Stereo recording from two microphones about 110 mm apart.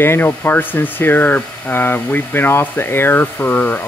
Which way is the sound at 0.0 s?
20° left (ahead or behind).